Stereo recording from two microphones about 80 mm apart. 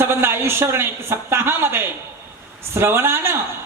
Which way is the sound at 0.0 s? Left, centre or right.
Right.